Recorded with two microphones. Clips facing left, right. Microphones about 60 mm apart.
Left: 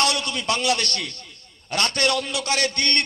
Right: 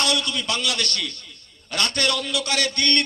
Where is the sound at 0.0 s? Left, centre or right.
Left.